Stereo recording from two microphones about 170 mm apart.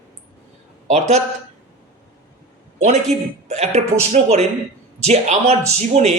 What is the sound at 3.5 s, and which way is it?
Speech, 40° right (ahead or behind).